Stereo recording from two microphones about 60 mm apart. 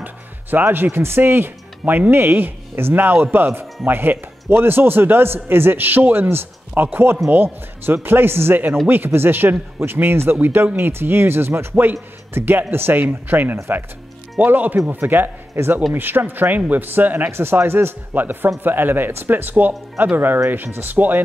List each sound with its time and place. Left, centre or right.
0.0 s a man's voice: right
11.7 s a man's voice: right
17.3 s a man's voice: right